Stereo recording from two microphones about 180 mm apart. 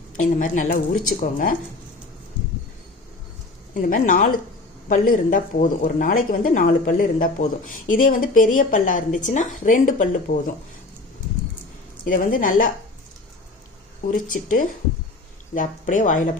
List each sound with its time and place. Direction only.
0.2 s speech: 45° left (ahead or behind)
3.8 s speech: 50° left (ahead or behind)
12.0 s speech: 50° left (ahead or behind)
14.1 s speech: 50° left (ahead or behind)